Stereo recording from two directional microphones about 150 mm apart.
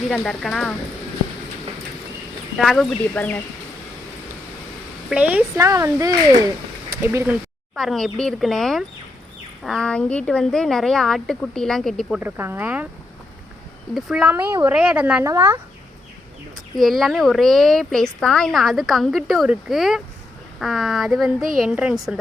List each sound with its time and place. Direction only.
0.1 s speech: centre (ahead or behind)
2.6 s speech: centre (ahead or behind)
5.0 s speech: 10° right (ahead or behind)
5.5 s speech: 20° right (ahead or behind)
7.8 s speech: centre (ahead or behind)
12.2 s speech: 15° right (ahead or behind)
13.9 s speech: 5° right (ahead or behind)
15.2 s speech: 20° right (ahead or behind)
16.7 s speech: centre (ahead or behind)